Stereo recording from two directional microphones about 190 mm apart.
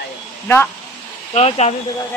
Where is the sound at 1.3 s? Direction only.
35° left (ahead or behind).